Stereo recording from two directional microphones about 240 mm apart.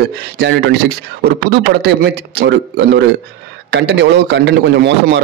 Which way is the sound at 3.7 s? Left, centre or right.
Right.